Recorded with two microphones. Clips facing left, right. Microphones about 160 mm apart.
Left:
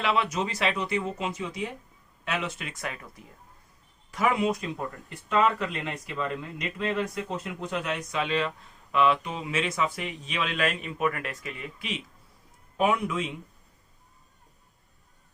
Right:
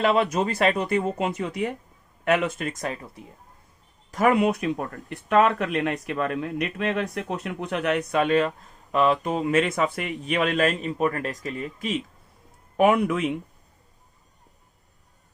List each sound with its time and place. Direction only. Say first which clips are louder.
0.0 s speech: right 6 dB; 45° right (ahead or behind); by 3.2 s 30° right (ahead or behind)
4.1 s speech: right 5 dB; 50° right (ahead or behind)
12.7 s speech: right 6 dB; 60° right (ahead or behind)